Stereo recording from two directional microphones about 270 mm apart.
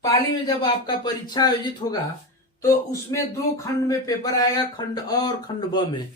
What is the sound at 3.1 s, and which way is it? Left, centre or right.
Speech, centre.